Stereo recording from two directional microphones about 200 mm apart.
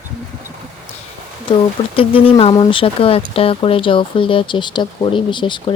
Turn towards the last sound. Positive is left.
turn(degrees=25)  # may be behind; listen again after turning